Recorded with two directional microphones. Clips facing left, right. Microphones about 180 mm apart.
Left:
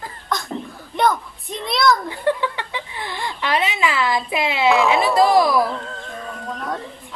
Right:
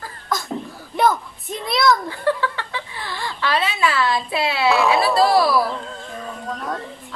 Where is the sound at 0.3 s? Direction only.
Centre (ahead or behind).